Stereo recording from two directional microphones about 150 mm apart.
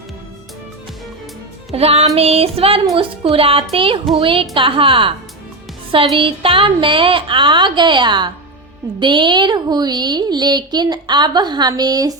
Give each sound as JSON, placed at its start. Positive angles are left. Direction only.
{"t": 1.7, "sound": "music", "side_deg": -40}
{"t": 2.1, "sound": "a woman's voice", "side_deg": -40}
{"t": 6.1, "sound": "a woman's voice", "side_deg": -35}